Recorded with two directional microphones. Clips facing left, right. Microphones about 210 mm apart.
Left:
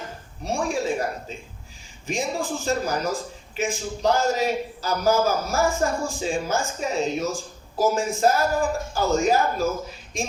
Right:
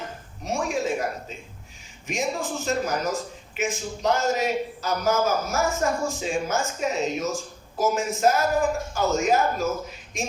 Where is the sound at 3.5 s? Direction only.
30° left (ahead or behind).